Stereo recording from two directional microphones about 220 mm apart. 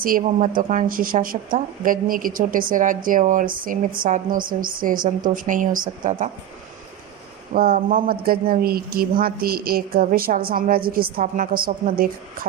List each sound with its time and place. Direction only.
0.0 s speech: 35° right (ahead or behind)
7.5 s speech: 40° right (ahead or behind)